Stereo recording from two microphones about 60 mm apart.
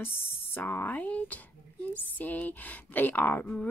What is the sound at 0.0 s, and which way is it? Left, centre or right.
A woman's voice, left.